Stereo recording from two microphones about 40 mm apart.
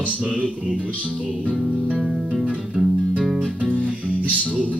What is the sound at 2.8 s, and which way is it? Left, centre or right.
Music, centre.